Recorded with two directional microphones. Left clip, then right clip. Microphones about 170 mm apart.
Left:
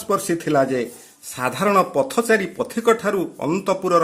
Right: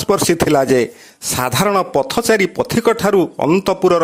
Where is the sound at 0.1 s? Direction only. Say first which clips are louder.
Right 6 dB; 55° right (ahead or behind).